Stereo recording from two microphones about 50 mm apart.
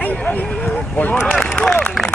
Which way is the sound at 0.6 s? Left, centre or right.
Left.